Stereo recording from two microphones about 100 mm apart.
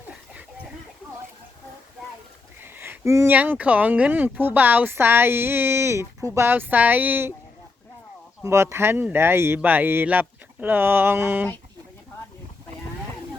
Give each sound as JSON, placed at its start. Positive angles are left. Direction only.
{"t": 2.6, "sound": "a sound", "side_deg": -20}
{"t": 3.3, "sound": "speech", "side_deg": -15}
{"t": 8.4, "sound": "speech", "side_deg": -25}